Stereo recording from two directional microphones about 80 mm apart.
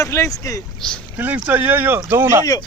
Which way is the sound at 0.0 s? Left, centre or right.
Left.